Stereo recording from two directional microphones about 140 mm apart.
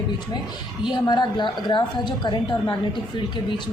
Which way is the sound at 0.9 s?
30° left (ahead or behind).